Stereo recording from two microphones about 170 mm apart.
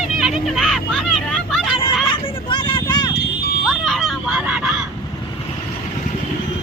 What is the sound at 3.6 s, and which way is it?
Vehicle, centre (ahead or behind).